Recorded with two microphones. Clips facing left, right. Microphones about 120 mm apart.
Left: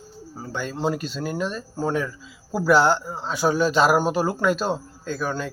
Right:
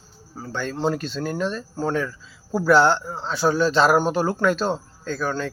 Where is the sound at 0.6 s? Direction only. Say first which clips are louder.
Right 2 dB; 5° left (ahead or behind).